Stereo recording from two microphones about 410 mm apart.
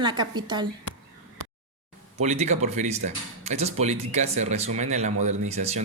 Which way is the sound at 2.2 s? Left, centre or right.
Centre.